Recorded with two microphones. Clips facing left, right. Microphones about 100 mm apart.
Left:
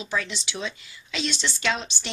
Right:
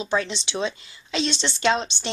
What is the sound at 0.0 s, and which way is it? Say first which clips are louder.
A woman's voice: right 5 dB; 30° right (ahead or behind).